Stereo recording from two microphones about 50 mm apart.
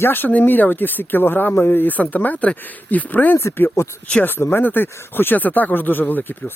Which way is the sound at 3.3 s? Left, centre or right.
Left.